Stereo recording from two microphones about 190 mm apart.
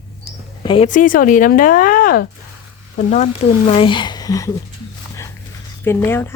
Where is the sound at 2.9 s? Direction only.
35° left (ahead or behind); by 4.5 s 20° left (ahead or behind).